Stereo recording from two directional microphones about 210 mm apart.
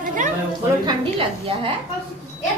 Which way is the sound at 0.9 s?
25° right (ahead or behind).